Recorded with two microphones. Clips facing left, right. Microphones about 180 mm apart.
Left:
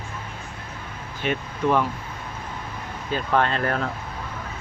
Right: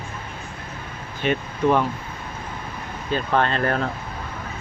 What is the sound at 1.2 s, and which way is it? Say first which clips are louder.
Speech: right 3 dB; 5° left (ahead or behind).